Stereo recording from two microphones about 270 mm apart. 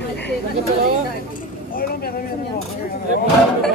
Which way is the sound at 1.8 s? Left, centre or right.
Left.